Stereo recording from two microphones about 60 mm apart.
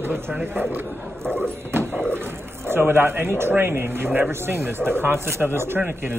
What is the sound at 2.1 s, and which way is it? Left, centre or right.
Speech, right.